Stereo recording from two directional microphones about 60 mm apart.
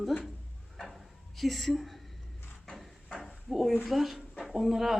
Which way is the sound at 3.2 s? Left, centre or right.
Centre.